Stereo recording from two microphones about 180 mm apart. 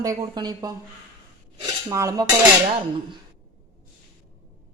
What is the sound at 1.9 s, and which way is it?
Speech, 15° right (ahead or behind).